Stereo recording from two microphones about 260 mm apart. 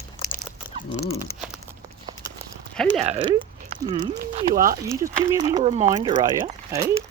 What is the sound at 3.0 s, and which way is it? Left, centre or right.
Speech, right.